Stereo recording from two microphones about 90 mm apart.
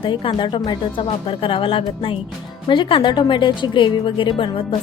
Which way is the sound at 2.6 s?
65° left (ahead or behind).